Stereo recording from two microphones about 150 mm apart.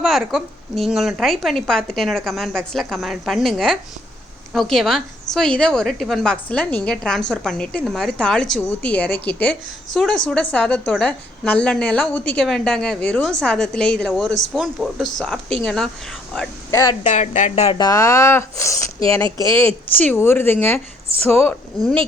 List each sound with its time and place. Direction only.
0.0 s a woman's voice: centre (ahead or behind)
17.1 s speech: 50° left (ahead or behind)
17.7 s speech: 20° left (ahead or behind)
19.2 s speech: 30° right (ahead or behind)
19.5 s a woman's voice: 15° left (ahead or behind)